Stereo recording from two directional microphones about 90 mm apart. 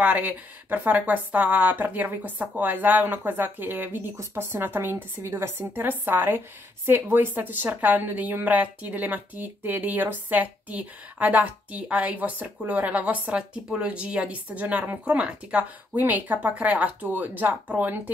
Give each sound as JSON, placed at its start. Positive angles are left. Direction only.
{"t": 0.0, "sound": "a woman's voice", "side_deg": -15}